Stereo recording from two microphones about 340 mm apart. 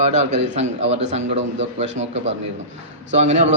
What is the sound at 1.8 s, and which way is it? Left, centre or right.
Speech, right.